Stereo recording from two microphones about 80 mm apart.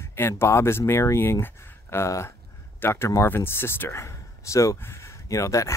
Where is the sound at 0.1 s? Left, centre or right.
Left.